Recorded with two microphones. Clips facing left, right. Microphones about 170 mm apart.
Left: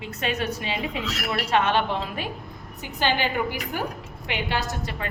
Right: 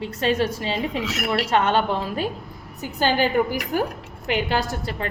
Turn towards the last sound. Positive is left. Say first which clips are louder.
# right 4 dB
turn(degrees=-35)  # may be behind; listen again after turning